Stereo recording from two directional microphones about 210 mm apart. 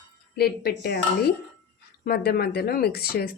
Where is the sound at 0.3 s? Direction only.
50° left (ahead or behind).